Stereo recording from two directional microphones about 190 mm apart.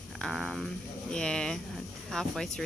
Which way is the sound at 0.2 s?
Centre (ahead or behind).